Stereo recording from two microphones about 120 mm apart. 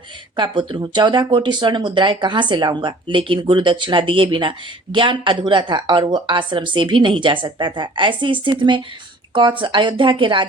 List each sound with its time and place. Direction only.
0.3 s speech: 45° right (ahead or behind)